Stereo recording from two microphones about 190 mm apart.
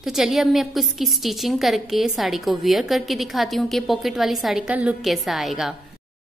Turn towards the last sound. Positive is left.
turn(degrees=0)  # may be behind; listen again after turning